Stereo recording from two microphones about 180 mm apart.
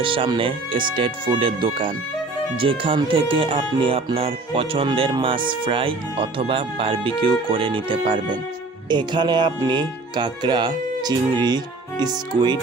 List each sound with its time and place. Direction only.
0.0 s speech: 30° right (ahead or behind)